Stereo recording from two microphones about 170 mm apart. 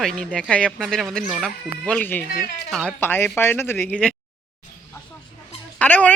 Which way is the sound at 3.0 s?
10° left (ahead or behind).